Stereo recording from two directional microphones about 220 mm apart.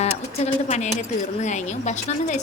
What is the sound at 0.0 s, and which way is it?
Speech, 30° left (ahead or behind).